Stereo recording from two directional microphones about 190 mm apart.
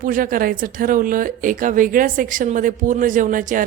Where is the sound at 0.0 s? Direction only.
45° right (ahead or behind).